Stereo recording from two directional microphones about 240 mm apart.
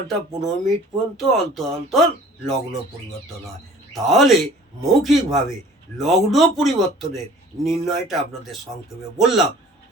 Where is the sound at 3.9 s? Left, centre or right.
Centre.